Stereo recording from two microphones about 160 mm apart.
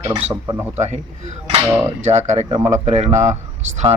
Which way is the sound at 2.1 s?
45° right (ahead or behind).